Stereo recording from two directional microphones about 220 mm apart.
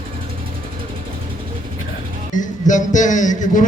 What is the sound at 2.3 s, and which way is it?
Speech, 35° left (ahead or behind).